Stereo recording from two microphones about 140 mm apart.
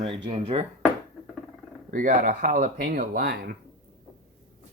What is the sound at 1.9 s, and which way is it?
Speech, 70° right (ahead or behind).